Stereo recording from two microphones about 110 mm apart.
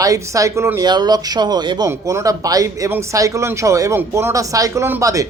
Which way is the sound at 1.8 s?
25° right (ahead or behind).